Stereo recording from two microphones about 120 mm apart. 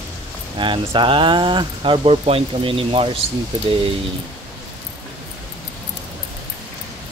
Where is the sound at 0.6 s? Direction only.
40° right (ahead or behind).